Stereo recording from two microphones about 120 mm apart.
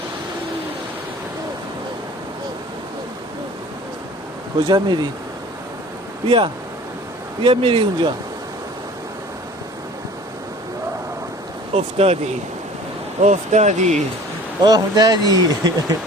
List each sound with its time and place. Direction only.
4.5 s speech: 40° right (ahead or behind)
6.2 s speech: 45° right (ahead or behind)
11.7 s speech: 60° right (ahead or behind)
13.2 s speech: 75° right (ahead or behind)
14.6 s speech: 35° right (ahead or behind)